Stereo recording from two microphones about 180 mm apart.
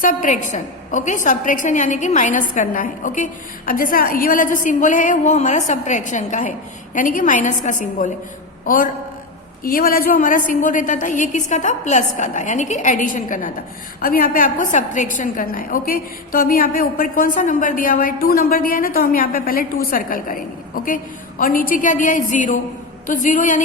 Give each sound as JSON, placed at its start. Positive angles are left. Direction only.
{"t": 0.0, "sound": "a woman's voice", "side_deg": 50}